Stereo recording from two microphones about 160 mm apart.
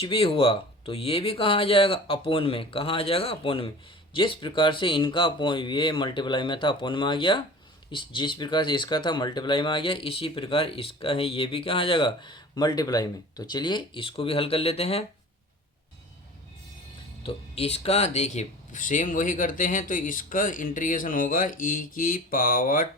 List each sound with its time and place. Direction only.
0.0 s speech: 35° left (ahead or behind)
17.2 s speech: 40° left (ahead or behind); by 22.9 s 60° left (ahead or behind)